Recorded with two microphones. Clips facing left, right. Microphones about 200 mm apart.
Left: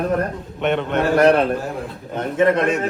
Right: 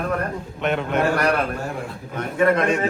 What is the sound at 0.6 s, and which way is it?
A man's voice, centre (ahead or behind).